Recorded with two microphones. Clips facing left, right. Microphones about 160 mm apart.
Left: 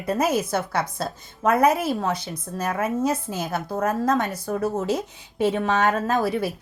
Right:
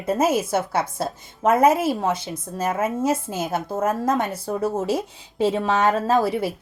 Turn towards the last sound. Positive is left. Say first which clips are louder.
# right 2 dB
turn(degrees=-25)  # may be behind; listen again after turning